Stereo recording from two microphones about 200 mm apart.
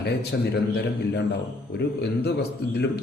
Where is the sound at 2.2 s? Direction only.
55° left (ahead or behind).